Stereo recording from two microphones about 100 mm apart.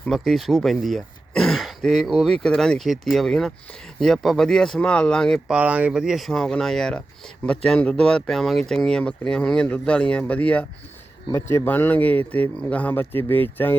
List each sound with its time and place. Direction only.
0.1 s speech: centre (ahead or behind)
5.5 s speech: 15° right (ahead or behind); by 10.7 s 15° left (ahead or behind)
11.3 s speech: 25° left (ahead or behind)